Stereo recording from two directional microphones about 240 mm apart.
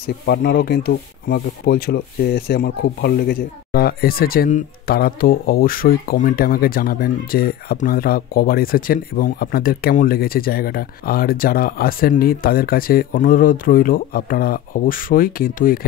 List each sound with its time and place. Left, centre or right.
0.0 s speech: left